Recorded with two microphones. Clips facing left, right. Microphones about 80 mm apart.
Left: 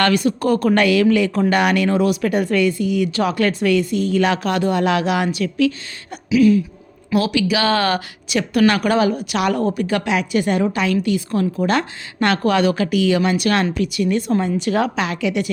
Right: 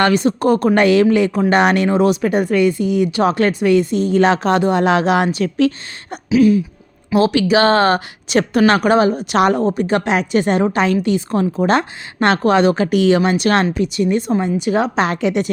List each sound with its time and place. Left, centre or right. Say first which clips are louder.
0.0 s a woman's voice: right 3 dB; right
14.9 s a woman's voice: right 4 dB; right